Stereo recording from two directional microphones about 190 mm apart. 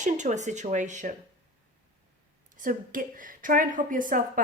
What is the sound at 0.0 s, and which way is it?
A woman's voice, 40° right (ahead or behind).